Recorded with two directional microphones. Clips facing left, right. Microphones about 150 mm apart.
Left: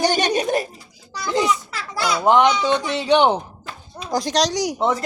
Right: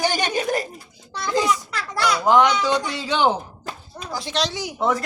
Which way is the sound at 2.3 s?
20° left (ahead or behind).